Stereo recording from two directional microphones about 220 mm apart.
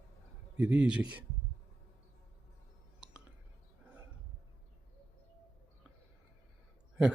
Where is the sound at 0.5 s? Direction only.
5° right (ahead or behind).